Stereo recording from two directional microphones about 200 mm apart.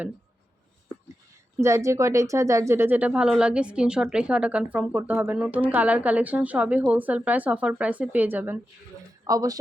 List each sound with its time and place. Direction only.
1.5 s a woman's voice: 15° right (ahead or behind)